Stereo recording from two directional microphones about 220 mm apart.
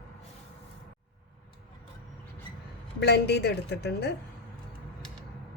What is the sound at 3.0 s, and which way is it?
A woman's voice, 50° left (ahead or behind).